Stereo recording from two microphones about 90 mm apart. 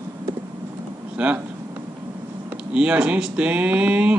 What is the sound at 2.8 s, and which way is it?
Speech, 15° right (ahead or behind).